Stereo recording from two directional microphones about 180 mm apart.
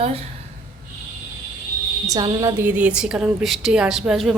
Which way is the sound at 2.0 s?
20° right (ahead or behind).